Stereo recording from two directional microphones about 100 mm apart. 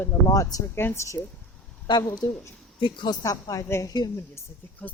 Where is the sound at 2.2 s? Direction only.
40° left (ahead or behind).